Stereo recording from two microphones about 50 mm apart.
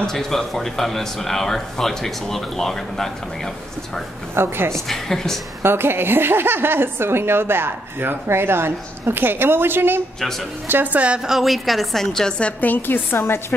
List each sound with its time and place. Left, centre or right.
0.0 s speech: centre
4.4 s speech: right
4.7 s speech: centre
5.6 s speech: right
10.7 s a woman's voice: right
11.2 s a woman's voice: centre
12.5 s a woman's voice: left
13.2 s a woman's voice: left